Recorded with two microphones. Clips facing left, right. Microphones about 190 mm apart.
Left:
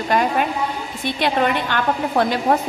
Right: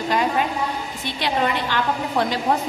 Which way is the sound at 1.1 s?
55° left (ahead or behind).